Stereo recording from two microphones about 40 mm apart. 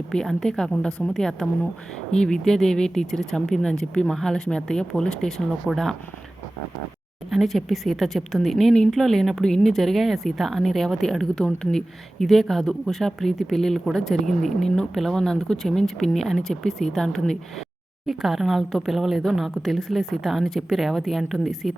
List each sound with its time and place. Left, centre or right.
0.1 s speech: centre
7.3 s a woman's voice: centre
9.4 s speech: centre
9.7 s a woman's voice: centre
18.0 s a woman's voice: centre